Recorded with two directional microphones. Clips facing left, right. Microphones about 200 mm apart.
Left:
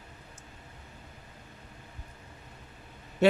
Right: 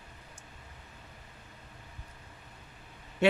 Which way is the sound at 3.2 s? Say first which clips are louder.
Left 3 dB; 40° left (ahead or behind).